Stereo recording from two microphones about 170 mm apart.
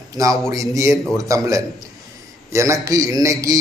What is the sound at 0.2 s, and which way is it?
A man's voice, 20° right (ahead or behind).